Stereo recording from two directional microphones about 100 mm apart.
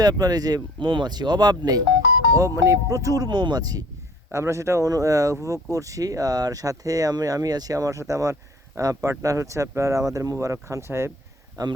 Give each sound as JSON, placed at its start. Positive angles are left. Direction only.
{"t": 0.0, "sound": "speech", "side_deg": -40}
{"t": 4.3, "sound": "speech", "side_deg": -30}
{"t": 11.6, "sound": "speech", "side_deg": -40}